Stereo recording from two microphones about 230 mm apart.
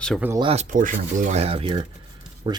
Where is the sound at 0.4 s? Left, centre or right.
Right.